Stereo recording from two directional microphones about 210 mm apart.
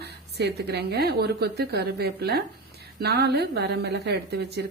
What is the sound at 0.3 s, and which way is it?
A woman's voice, 50° right (ahead or behind).